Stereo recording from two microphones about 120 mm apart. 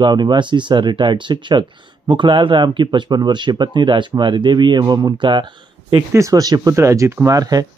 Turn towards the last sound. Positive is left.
turn(degrees=-30)  # may be behind; listen again after turning